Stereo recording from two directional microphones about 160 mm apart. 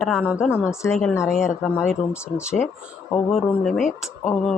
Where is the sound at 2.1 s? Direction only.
15° left (ahead or behind).